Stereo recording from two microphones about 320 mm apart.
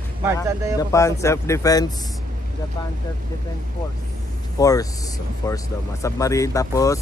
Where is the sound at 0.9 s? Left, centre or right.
Centre.